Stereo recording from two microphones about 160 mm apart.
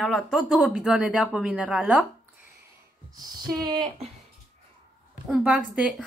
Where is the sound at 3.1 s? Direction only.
25° right (ahead or behind).